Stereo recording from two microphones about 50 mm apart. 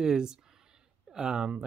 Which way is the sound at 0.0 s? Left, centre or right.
Centre.